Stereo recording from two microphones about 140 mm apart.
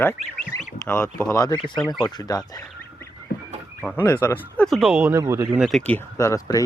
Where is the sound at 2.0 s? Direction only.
25° left (ahead or behind).